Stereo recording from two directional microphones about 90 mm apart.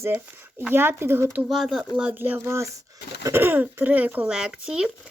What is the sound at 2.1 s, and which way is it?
Speech, 25° right (ahead or behind).